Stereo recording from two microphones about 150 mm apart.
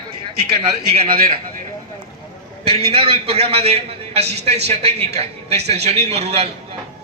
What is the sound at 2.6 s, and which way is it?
A man's voice, 40° right (ahead or behind).